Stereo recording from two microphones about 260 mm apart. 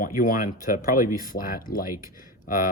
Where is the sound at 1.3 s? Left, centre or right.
Left.